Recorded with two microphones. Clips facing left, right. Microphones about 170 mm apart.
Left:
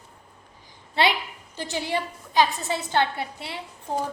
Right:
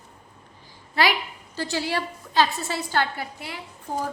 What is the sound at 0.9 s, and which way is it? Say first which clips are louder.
A woman's voice: even; 25° left (ahead or behind).